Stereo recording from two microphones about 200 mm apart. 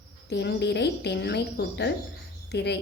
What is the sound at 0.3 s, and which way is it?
A woman's voice, 60° left (ahead or behind).